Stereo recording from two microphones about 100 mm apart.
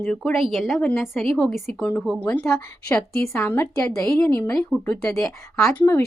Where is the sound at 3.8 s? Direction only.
10° left (ahead or behind).